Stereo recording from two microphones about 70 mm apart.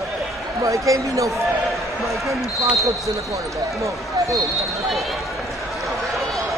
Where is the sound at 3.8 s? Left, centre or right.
Right.